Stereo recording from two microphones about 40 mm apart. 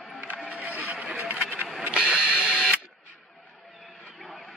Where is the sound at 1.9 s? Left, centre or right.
Right.